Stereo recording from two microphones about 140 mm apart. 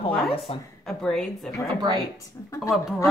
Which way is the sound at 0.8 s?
5° left (ahead or behind).